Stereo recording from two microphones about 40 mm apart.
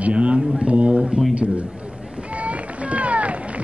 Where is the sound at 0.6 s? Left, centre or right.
Right.